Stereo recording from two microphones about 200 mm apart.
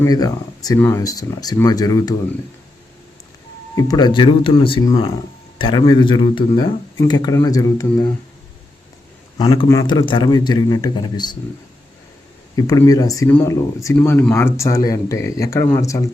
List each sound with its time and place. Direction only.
0.0 s speech: 20° left (ahead or behind)
3.8 s speech: 20° left (ahead or behind)
9.4 s speech: 20° left (ahead or behind)
12.5 s speech: 15° left (ahead or behind)